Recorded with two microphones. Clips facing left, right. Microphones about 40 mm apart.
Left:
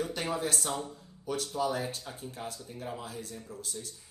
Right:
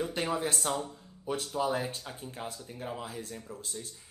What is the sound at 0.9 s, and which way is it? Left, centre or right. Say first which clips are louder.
A woman's voice: even; right.